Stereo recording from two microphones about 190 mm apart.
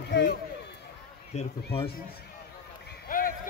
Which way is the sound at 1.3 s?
35° left (ahead or behind).